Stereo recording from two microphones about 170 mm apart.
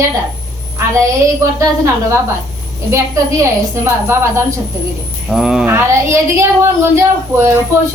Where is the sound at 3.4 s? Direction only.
15° right (ahead or behind).